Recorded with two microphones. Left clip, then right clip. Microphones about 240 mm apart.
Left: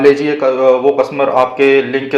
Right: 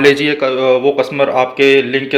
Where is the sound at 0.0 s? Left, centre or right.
Right.